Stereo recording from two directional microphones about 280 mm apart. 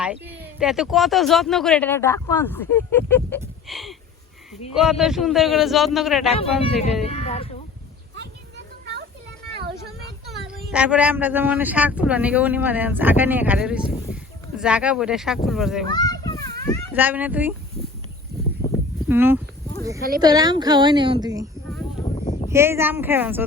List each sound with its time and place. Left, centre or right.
0.0 s speech: centre
7.0 s speech: left
8.1 s a sound: right
10.2 s speech: centre
15.9 s children playing: centre
16.9 s speech: centre
19.0 s speech: centre
20.0 s speech: right
20.2 s a woman's voice: centre
22.4 s a woman's voice: centre